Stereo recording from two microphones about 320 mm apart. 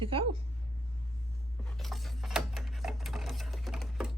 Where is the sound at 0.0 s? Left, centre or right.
Centre.